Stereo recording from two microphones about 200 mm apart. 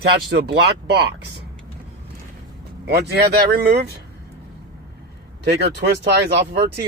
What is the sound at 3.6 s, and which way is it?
Speech, 55° right (ahead or behind).